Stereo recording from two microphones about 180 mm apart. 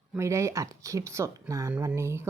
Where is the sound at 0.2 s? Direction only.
15° right (ahead or behind).